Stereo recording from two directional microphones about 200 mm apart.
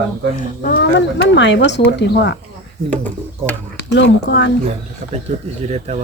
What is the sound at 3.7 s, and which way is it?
Speech, 60° left (ahead or behind).